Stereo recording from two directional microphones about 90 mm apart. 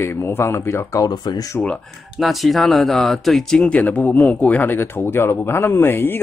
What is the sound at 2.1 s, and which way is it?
Speech, centre (ahead or behind).